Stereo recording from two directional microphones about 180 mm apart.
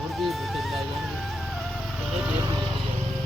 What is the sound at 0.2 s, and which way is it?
Music, centre (ahead or behind).